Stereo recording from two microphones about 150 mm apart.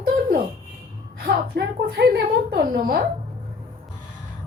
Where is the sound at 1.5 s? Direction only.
90° right.